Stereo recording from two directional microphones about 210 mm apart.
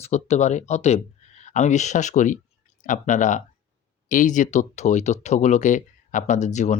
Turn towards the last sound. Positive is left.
turn(degrees=35)  # may be behind; listen again after turning